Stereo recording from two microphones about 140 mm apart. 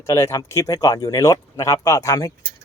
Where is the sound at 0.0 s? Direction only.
20° left (ahead or behind).